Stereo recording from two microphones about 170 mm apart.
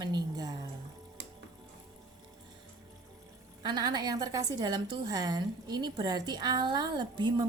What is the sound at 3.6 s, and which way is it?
A woman's voice, 25° right (ahead or behind).